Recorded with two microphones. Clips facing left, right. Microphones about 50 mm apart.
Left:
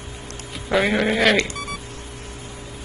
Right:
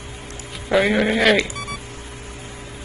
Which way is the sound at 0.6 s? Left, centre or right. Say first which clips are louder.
Right 2 dB; centre.